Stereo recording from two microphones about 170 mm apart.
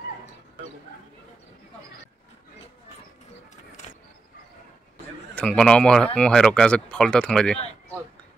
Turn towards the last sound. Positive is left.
turn(degrees=5)  # may be behind; listen again after turning